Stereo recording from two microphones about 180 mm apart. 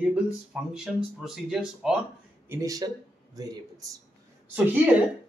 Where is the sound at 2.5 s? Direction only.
20° right (ahead or behind).